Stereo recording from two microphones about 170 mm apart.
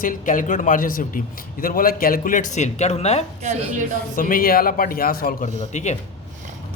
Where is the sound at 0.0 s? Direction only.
50° left (ahead or behind).